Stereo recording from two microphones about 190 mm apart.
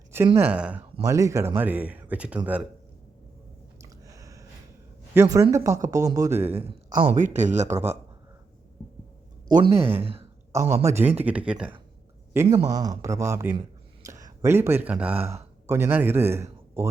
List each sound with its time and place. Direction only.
0.3 s speech: 10° right (ahead or behind)
3.8 s a sound: 20° right (ahead or behind)
5.1 s speech: 15° right (ahead or behind)
6.5 s speech: 30° right (ahead or behind)
6.9 s speech: 40° right (ahead or behind)
9.6 s speech: 30° right (ahead or behind)
10.5 s a man's voice: 15° right (ahead or behind)